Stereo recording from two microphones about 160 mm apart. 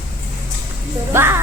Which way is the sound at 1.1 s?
15° right (ahead or behind).